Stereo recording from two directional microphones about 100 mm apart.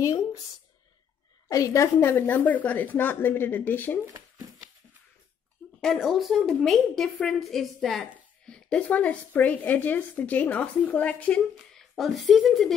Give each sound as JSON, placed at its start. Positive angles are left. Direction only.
{"t": 0.0, "sound": "speech", "side_deg": 30}
{"t": 1.5, "sound": "a woman's voice", "side_deg": 35}
{"t": 5.8, "sound": "a woman's voice", "side_deg": 5}
{"t": 11.9, "sound": "a woman's voice", "side_deg": 0}